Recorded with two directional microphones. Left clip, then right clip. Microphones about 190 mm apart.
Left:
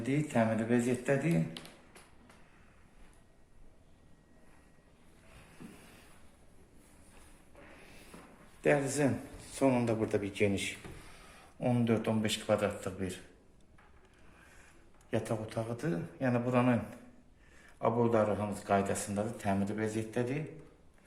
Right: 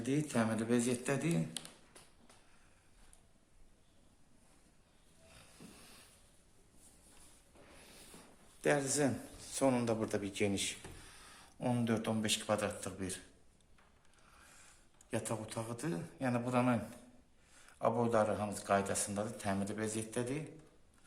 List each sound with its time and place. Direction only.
0.0 s a man's voice: 15° right (ahead or behind)
1.6 s speech: 55° right (ahead or behind)
8.6 s a man's voice: 15° right (ahead or behind)
15.1 s a man's voice: centre (ahead or behind)
15.6 s a man's voice: 15° right (ahead or behind)
17.7 s a man's voice: 15° right (ahead or behind)